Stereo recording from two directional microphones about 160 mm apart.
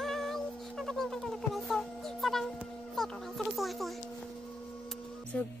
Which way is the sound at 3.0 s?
Centre (ahead or behind).